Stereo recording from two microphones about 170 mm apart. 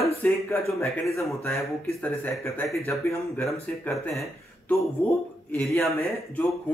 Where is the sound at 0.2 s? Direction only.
15° left (ahead or behind).